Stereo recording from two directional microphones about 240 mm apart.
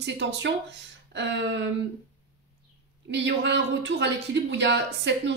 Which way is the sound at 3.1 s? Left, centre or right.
Right.